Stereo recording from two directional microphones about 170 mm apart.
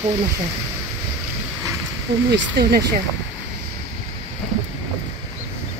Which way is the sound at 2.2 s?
75° right (ahead or behind).